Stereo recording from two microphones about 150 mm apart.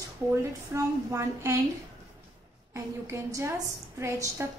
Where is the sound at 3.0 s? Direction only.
20° right (ahead or behind).